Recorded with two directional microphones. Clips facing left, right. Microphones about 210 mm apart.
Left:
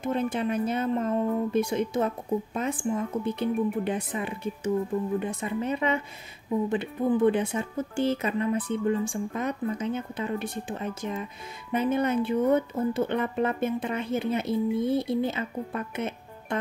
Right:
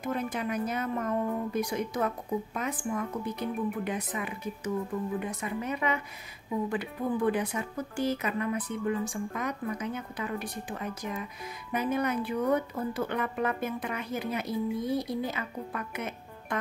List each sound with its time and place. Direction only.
0.0 s speech: 25° left (ahead or behind)